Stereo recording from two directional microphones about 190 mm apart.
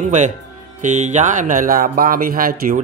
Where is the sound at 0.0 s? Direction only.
40° right (ahead or behind).